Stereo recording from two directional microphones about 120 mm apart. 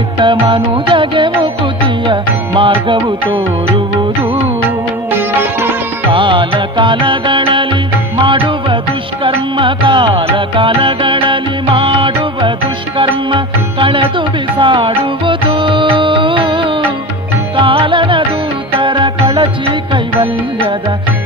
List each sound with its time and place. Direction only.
0.2 s music: 45° right (ahead or behind)
2.6 s music: 45° right (ahead or behind)
5.1 s music: 15° right (ahead or behind)
6.1 s music: 45° right (ahead or behind)